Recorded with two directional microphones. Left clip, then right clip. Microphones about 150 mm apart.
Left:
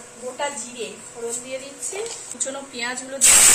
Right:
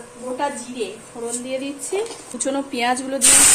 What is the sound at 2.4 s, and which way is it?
Speech, 75° right (ahead or behind).